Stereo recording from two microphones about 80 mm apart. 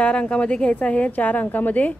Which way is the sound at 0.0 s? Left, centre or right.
Centre.